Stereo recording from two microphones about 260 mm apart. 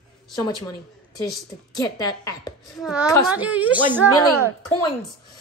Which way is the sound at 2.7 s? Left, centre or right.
Centre.